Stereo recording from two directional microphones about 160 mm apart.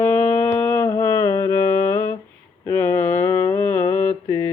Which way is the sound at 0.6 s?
15° left (ahead or behind).